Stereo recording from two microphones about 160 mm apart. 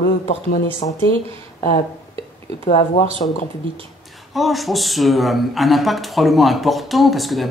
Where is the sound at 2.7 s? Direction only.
40° left (ahead or behind).